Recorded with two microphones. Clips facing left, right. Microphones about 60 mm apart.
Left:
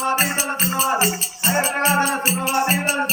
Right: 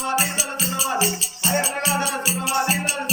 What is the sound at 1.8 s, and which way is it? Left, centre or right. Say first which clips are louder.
Music: left 5 dB; left.